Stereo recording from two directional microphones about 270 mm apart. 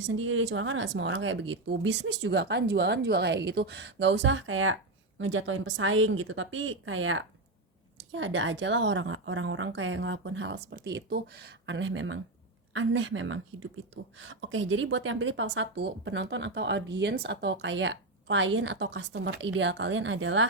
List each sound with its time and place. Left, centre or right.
0.0 s speech: right